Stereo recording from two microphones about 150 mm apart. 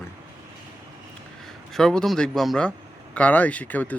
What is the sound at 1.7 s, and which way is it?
A man's voice, 5° left (ahead or behind).